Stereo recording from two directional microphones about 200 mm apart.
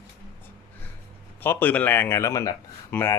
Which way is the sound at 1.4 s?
10° left (ahead or behind).